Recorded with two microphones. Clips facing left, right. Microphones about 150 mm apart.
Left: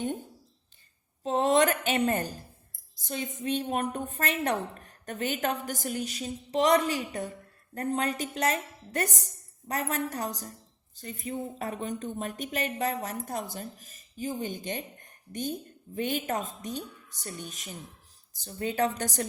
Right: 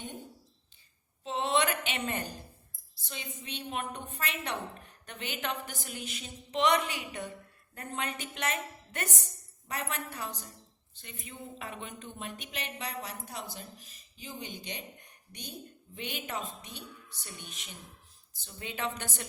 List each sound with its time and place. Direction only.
1.2 s a woman's voice: 45° left (ahead or behind)